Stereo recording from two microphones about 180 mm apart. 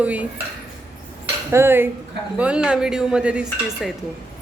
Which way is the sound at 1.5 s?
15° right (ahead or behind).